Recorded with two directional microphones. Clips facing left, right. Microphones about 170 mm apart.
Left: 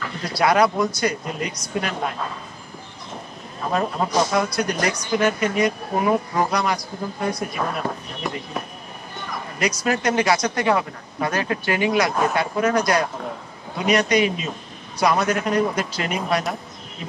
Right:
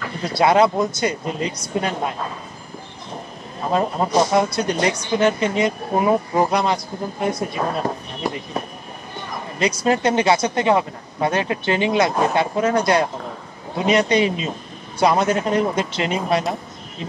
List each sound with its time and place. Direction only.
0.3 s speech: 25° right (ahead or behind)
4.3 s speech: 25° right (ahead or behind)
9.6 s speech: 25° right (ahead or behind)